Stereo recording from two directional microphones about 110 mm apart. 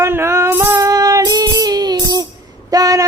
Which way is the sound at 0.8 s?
30° right (ahead or behind).